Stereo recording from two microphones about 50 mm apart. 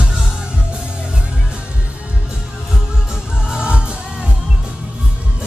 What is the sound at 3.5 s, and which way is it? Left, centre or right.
Music, centre.